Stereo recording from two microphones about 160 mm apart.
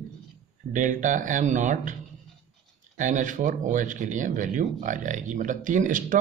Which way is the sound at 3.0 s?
55° right (ahead or behind).